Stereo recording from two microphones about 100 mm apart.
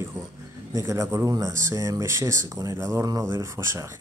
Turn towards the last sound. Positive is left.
turn(degrees=-30)  # may be behind; listen again after turning